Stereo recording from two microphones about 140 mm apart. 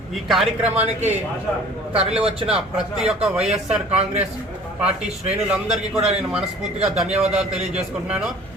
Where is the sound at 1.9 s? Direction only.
45° right (ahead or behind).